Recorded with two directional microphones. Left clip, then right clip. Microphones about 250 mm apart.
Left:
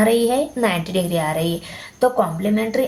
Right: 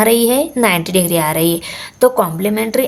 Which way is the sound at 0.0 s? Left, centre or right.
Right.